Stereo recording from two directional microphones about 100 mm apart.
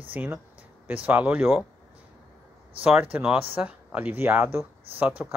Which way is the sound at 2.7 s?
15° right (ahead or behind).